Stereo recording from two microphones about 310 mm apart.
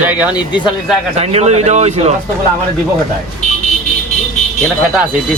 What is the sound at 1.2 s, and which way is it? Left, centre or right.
Speech, centre.